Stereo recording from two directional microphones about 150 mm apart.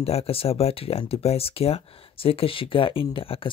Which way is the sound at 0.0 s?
40° left (ahead or behind).